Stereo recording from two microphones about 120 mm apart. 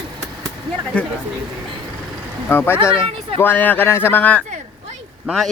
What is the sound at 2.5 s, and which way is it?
Speech, 15° left (ahead or behind).